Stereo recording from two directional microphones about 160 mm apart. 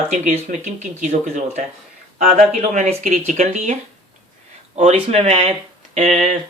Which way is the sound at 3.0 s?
55° right (ahead or behind).